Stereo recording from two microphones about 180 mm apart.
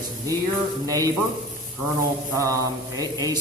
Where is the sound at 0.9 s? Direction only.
20° right (ahead or behind).